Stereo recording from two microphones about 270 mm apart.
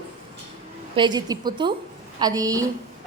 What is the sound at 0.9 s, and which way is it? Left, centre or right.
A woman's voice, centre.